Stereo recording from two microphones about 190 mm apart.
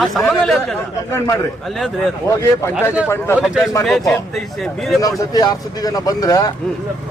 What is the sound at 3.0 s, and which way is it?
Speech, 15° left (ahead or behind).